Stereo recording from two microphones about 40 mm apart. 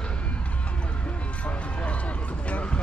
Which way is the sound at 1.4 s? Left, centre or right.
Left.